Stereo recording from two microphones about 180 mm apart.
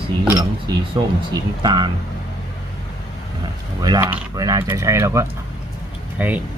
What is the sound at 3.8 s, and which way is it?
Speech, 20° right (ahead or behind).